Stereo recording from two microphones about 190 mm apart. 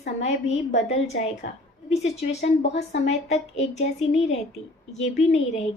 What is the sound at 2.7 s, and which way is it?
A woman's voice, 35° left (ahead or behind).